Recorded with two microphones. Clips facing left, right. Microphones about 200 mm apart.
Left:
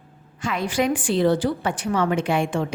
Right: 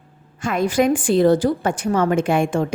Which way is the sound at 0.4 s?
45° right (ahead or behind).